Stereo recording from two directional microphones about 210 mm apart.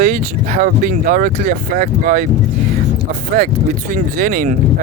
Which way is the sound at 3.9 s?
40° right (ahead or behind).